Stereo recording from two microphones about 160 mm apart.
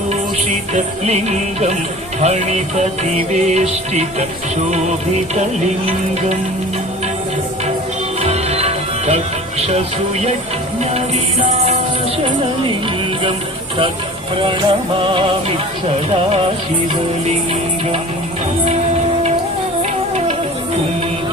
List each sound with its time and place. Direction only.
0.7 s music: 45° right (ahead or behind)
8.2 s music: 40° right (ahead or behind)
14.3 s music: 30° right (ahead or behind)